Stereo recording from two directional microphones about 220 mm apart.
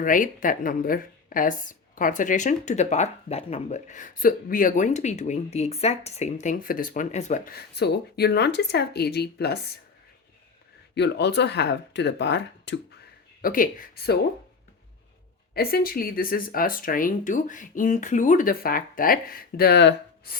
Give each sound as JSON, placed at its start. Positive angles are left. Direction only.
{"t": 0.0, "sound": "a woman's voice", "side_deg": 35}
{"t": 10.9, "sound": "speech", "side_deg": 50}
{"t": 13.4, "sound": "a woman's voice", "side_deg": 40}
{"t": 15.5, "sound": "a woman's voice", "side_deg": 45}